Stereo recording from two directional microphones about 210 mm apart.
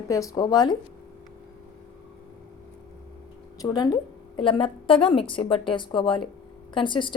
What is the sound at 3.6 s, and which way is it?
A woman's voice, 20° left (ahead or behind).